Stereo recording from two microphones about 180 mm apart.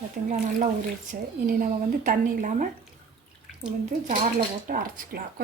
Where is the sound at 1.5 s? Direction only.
50° right (ahead or behind).